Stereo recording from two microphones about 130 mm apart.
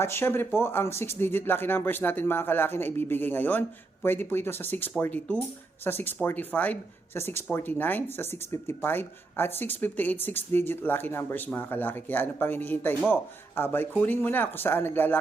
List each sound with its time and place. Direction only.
0.0 s speech: 20° left (ahead or behind)